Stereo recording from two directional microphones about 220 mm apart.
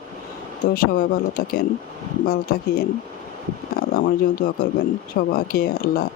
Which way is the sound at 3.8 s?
40° left (ahead or behind).